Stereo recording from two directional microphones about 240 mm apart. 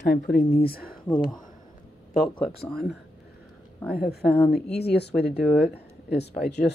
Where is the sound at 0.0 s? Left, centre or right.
Left.